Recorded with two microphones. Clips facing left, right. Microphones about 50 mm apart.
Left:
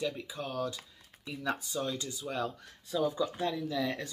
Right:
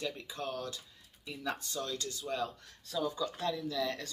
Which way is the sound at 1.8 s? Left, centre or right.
Centre.